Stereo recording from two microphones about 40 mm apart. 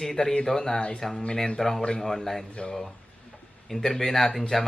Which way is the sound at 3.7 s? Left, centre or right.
Centre.